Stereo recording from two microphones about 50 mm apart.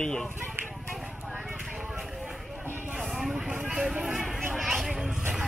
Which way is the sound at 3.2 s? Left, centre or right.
Centre.